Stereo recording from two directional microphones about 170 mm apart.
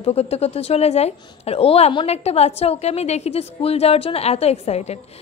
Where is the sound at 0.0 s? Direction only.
35° left (ahead or behind).